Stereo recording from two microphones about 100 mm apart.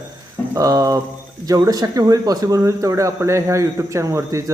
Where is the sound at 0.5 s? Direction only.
35° right (ahead or behind).